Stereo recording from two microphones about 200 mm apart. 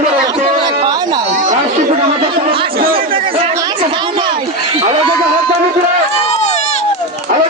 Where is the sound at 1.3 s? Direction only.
35° right (ahead or behind).